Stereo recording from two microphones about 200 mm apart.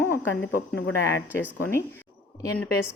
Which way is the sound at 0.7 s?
60° left (ahead or behind).